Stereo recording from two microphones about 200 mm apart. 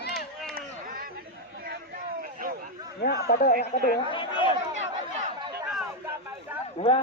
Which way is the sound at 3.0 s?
50° left (ahead or behind).